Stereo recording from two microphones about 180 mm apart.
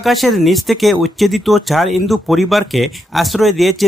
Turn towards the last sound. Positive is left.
turn(degrees=0)  # may be behind; listen again after turning